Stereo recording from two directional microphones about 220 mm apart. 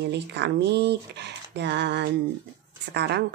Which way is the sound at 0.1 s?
50° right (ahead or behind).